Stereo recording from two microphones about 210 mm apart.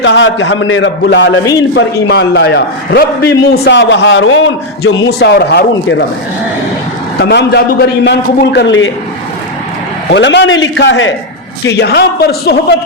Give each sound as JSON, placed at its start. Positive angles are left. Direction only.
{"t": 0.0, "sound": "a man's voice", "side_deg": 60}
{"t": 7.2, "sound": "a man's voice", "side_deg": 50}
{"t": 10.1, "sound": "a man's voice", "side_deg": 55}